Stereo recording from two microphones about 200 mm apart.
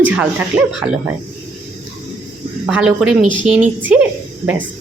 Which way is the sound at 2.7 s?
5° right (ahead or behind).